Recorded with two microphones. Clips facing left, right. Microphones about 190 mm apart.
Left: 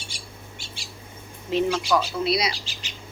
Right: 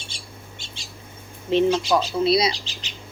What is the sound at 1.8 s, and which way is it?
Speech, 25° right (ahead or behind).